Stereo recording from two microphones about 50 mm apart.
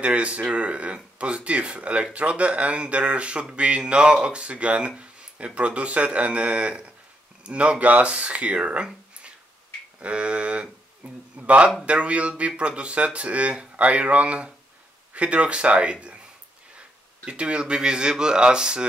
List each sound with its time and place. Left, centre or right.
0.0 s a man's voice: right